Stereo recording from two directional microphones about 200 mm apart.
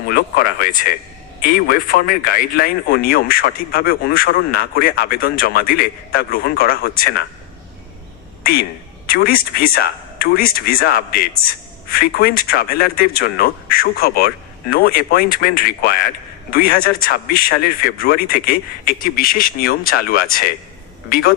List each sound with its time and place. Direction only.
0.1 s speech: 45° left (ahead or behind)
9.0 s speech: 45° left (ahead or behind)